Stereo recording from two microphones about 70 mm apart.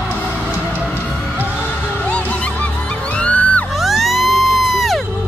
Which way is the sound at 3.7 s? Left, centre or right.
Centre.